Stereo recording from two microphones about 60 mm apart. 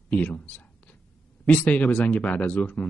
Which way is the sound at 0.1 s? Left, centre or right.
Left.